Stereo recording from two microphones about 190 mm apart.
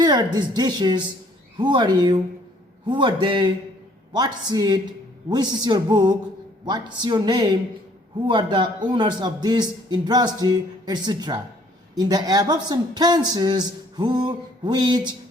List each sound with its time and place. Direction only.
0.0 s speech: 20° right (ahead or behind)